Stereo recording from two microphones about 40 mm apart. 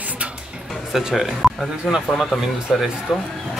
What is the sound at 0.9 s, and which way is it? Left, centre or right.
Speech, centre.